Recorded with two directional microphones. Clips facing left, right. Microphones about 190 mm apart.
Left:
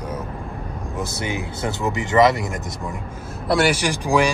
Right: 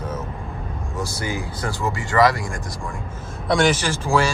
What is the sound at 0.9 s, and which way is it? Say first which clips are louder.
Speech: left 1 dB; 25° left (ahead or behind).